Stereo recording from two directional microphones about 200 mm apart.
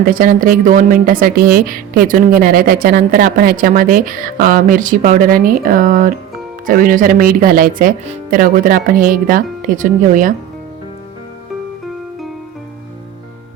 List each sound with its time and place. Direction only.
0.0 s a woman's voice: 45° right (ahead or behind)